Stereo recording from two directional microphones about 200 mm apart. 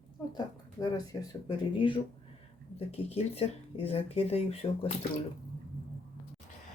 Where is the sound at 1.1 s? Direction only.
20° left (ahead or behind).